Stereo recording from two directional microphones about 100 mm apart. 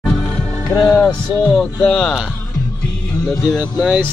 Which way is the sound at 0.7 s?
25° left (ahead or behind).